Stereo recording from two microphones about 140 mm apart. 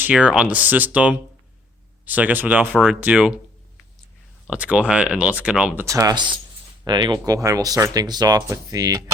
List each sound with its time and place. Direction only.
0.0 s speech: 10° right (ahead or behind)
4.4 s speech: 10° right (ahead or behind)
5.8 s speech: 20° right (ahead or behind)